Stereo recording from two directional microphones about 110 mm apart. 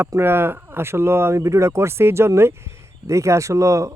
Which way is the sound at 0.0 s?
20° right (ahead or behind).